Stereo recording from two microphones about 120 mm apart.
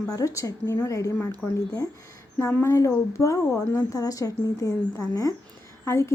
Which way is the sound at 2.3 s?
25° left (ahead or behind).